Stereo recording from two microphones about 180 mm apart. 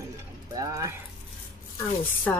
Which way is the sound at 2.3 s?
10° left (ahead or behind).